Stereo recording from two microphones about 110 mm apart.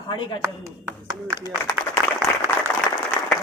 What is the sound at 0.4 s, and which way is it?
Speech, 30° right (ahead or behind).